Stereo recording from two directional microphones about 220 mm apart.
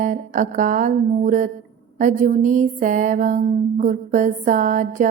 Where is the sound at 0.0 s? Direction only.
35° right (ahead or behind).